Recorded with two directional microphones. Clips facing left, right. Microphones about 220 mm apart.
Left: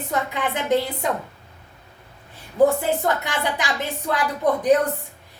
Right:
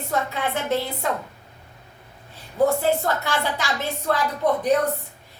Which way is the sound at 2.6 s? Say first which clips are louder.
Right 3 dB; 15° left (ahead or behind).